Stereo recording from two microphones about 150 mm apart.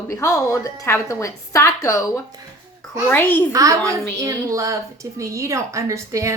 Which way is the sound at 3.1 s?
10° left (ahead or behind).